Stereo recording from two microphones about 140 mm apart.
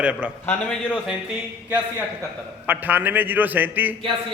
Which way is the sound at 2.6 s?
10° right (ahead or behind).